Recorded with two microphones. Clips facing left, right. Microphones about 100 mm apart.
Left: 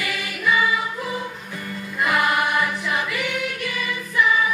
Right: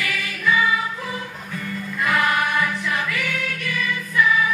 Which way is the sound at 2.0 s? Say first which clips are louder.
Even; 15° left (ahead or behind).